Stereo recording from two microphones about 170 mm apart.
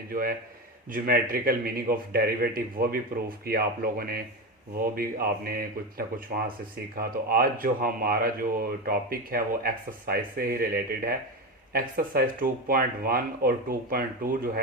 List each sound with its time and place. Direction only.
0.1 s speech: 60° right (ahead or behind)